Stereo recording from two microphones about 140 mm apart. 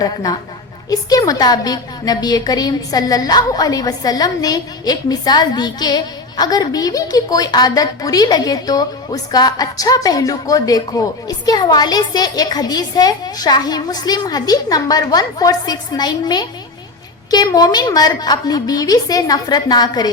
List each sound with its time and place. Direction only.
0.0 s a woman's voice: 25° left (ahead or behind)